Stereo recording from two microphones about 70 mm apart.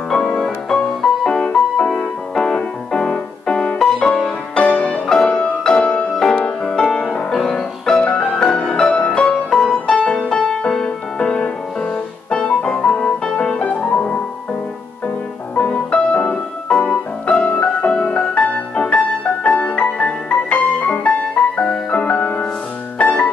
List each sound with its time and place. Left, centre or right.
0.1 s music: centre
5.0 s music: centre
15.5 s music: left